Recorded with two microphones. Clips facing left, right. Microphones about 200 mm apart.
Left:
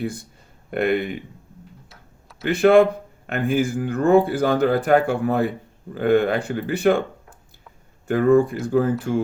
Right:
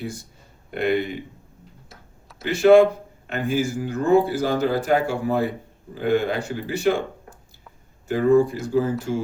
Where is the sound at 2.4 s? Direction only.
55° left (ahead or behind).